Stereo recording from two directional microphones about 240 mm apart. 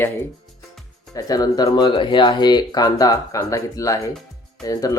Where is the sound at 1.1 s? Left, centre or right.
Centre.